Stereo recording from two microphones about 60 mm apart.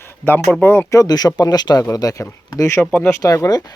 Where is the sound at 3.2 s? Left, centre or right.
Left.